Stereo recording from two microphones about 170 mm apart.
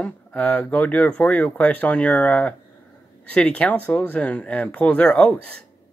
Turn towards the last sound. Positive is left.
turn(degrees=5)  # may be behind; listen again after turning